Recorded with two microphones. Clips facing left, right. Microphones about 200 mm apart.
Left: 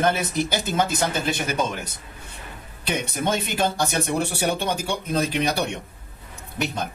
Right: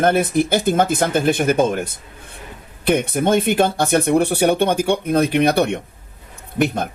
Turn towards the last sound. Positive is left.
turn(degrees=-55)  # may be behind; listen again after turning